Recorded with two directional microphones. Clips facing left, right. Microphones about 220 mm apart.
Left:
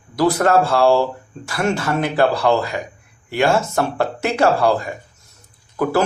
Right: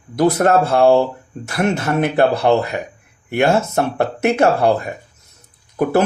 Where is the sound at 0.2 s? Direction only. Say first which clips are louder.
Right 1 dB; 25° right (ahead or behind).